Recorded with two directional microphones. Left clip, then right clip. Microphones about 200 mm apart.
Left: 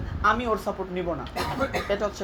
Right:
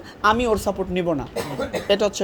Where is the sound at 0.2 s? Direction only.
45° right (ahead or behind).